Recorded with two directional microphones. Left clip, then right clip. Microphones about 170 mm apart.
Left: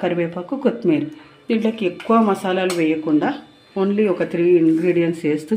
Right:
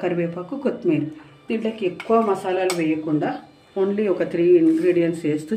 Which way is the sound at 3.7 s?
30° left (ahead or behind).